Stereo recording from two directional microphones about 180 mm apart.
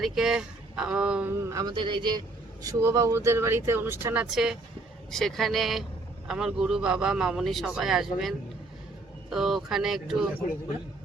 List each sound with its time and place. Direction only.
0.0 s speech: centre (ahead or behind)
1.5 s a man's voice: 20° right (ahead or behind); by 10.2 s centre (ahead or behind)